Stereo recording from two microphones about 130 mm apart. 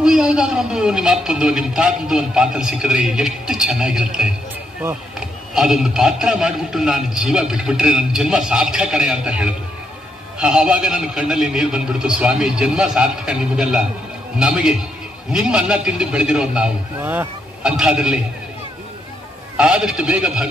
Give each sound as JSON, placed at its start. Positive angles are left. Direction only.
{"t": 0.0, "sound": "a man's voice", "side_deg": -5}
{"t": 5.5, "sound": "a man's voice", "side_deg": -5}
{"t": 19.5, "sound": "a man's voice", "side_deg": -10}